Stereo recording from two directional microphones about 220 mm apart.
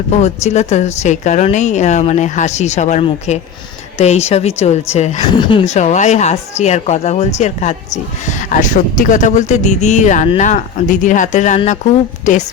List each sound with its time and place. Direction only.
0.2 s a woman's voice: 30° left (ahead or behind)